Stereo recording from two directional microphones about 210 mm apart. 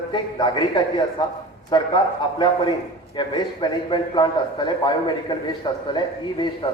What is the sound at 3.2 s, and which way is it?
A man's voice, 20° left (ahead or behind).